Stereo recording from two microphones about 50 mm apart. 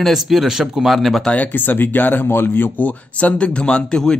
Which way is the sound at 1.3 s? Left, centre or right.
Left.